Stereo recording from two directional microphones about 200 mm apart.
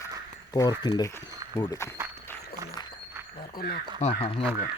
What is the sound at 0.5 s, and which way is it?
Speech, 20° left (ahead or behind).